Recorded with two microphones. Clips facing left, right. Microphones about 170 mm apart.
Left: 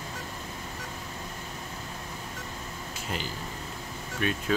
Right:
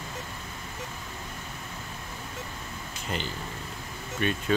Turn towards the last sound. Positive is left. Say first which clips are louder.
# right 1 dB
turn(degrees=5)  # may be behind; listen again after turning